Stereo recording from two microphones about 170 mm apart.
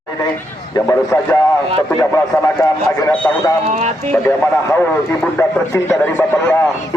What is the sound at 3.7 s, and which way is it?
Speech, 40° right (ahead or behind).